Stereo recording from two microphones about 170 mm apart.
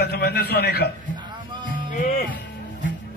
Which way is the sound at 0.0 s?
70° left (ahead or behind).